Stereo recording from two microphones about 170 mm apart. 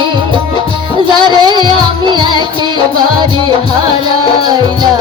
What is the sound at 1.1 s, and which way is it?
Music, 25° right (ahead or behind).